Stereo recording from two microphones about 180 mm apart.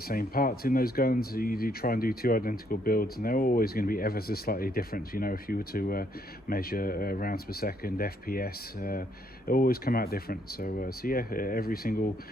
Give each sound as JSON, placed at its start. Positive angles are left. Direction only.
{"t": 0.1, "sound": "speech", "side_deg": 55}